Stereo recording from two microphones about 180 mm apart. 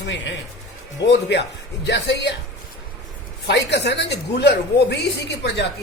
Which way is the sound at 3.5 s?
70° left (ahead or behind).